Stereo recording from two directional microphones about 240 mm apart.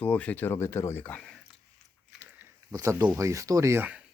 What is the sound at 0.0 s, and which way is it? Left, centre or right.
Speech, centre.